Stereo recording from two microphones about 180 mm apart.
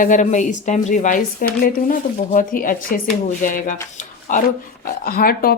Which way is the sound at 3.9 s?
45° left (ahead or behind).